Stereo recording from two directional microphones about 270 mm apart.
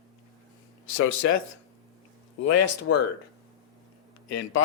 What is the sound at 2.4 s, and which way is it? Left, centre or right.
Speech, left.